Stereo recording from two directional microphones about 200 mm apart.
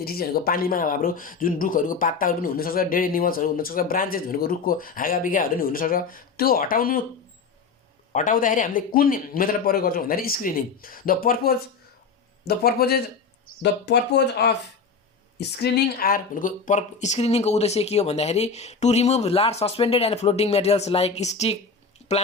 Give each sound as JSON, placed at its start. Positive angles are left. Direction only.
{"t": 0.0, "sound": "speech", "side_deg": 50}
{"t": 8.1, "sound": "speech", "side_deg": 40}